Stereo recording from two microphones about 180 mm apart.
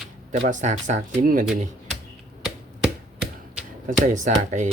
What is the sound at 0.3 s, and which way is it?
Speech, 45° right (ahead or behind).